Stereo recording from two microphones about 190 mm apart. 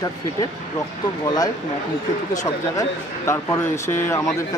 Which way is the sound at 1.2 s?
20° left (ahead or behind).